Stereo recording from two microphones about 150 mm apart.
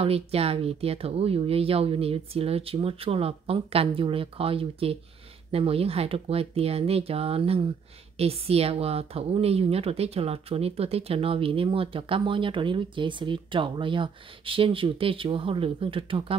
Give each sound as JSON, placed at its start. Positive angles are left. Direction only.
{"t": 0.0, "sound": "speech", "side_deg": -40}